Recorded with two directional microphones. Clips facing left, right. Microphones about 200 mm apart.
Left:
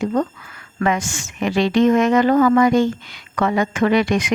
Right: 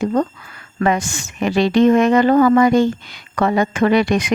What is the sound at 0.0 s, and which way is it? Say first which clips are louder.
A woman's voice: right 2 dB; 40° right (ahead or behind).